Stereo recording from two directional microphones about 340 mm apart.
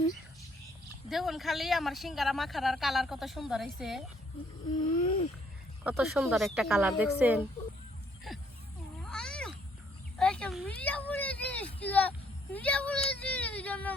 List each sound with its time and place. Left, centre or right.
1.1 s a woman's voice: centre
4.8 s wheeze: centre
5.8 s a woman's voice: centre
8.3 s a sound: centre
9.0 s cat: centre
10.2 s speech: centre